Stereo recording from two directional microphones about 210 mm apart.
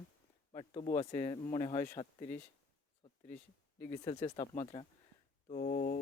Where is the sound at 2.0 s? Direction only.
35° left (ahead or behind).